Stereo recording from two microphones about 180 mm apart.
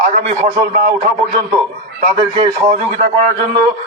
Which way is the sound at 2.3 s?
30° right (ahead or behind).